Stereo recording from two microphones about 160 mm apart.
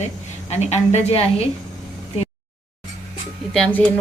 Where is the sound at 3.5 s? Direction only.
5° left (ahead or behind).